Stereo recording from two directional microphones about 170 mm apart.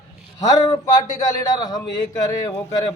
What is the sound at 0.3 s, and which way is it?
A man's voice, 20° left (ahead or behind).